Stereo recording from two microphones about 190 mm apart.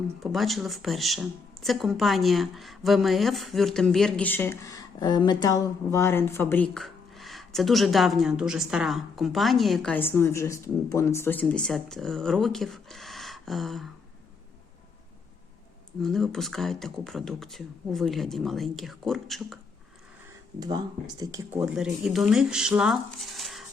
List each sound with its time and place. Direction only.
0.2 s speech: centre (ahead or behind)
16.0 s speech: centre (ahead or behind)
20.6 s speech: 20° right (ahead or behind)
21.6 s speech: 5° right (ahead or behind)